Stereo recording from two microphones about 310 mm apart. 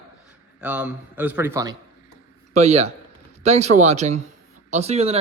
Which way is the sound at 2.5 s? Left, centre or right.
Right.